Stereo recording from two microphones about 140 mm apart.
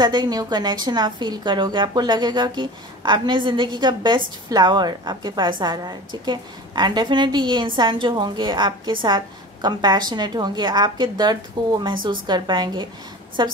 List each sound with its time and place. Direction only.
0.0 s a woman's voice: 30° right (ahead or behind)